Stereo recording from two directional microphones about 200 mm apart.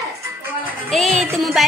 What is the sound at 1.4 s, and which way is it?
Speech, centre (ahead or behind).